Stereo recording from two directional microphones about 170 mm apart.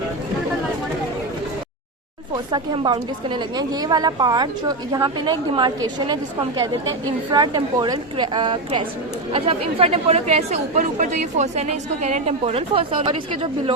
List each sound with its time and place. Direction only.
2.3 s a woman's voice: 25° right (ahead or behind)
7.3 s a woman's voice: 25° right (ahead or behind)